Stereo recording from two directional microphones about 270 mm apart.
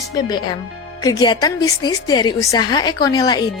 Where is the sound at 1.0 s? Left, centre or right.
Centre.